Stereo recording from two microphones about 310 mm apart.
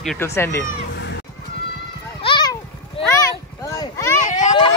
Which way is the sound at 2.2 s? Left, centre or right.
Centre.